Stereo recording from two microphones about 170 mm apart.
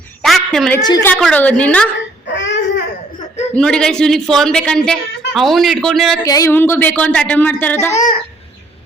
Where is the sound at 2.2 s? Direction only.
90° left.